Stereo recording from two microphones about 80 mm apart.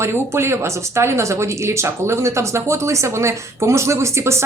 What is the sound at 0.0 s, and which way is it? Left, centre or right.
A woman's voice, right.